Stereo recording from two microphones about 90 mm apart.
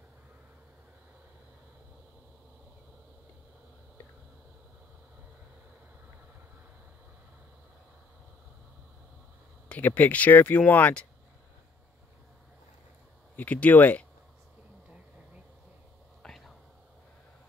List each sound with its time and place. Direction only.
9.7 s speech: 20° left (ahead or behind)
13.4 s speech: 15° left (ahead or behind)
16.2 s whispering: 5° left (ahead or behind)